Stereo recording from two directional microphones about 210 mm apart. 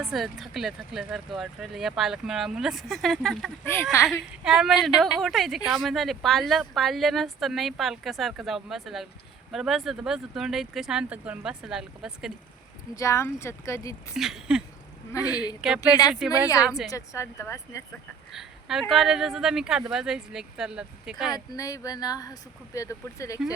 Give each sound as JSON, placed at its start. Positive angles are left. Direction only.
{"t": 0.0, "sound": "speech", "side_deg": 0}
{"t": 3.9, "sound": "speech", "side_deg": 15}
{"t": 4.3, "sound": "speech", "side_deg": -5}
{"t": 13.0, "sound": "speech", "side_deg": 15}
{"t": 14.1, "sound": "speech", "side_deg": 0}
{"t": 15.6, "sound": "speech", "side_deg": -5}
{"t": 16.9, "sound": "speech", "side_deg": 15}
{"t": 18.3, "sound": "speech", "side_deg": 0}
{"t": 21.3, "sound": "speech", "side_deg": 15}